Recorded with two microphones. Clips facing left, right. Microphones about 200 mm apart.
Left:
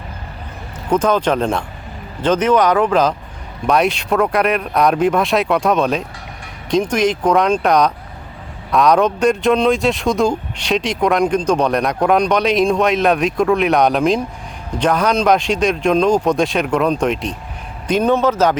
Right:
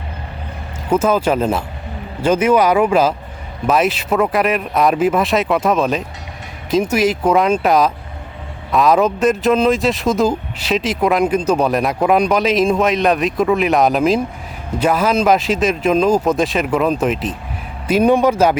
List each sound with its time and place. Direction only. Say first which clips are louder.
0.9 s speech: even; 5° right (ahead or behind)